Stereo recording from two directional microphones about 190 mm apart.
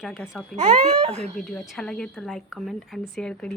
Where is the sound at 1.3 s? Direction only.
Centre (ahead or behind).